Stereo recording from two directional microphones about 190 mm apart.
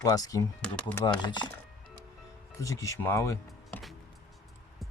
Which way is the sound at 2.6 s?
15° left (ahead or behind).